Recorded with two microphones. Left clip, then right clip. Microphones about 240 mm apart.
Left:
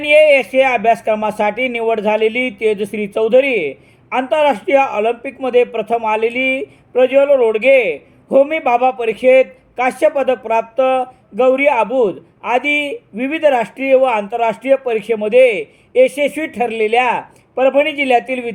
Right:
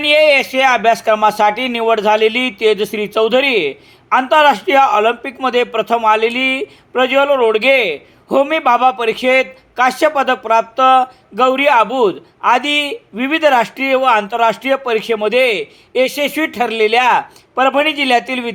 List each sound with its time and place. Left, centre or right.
0.0 s speech: centre